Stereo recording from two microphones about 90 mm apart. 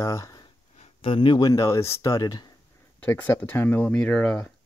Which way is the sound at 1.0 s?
70° left (ahead or behind).